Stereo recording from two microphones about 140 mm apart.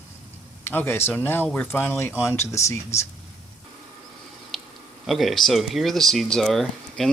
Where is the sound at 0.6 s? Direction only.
15° left (ahead or behind).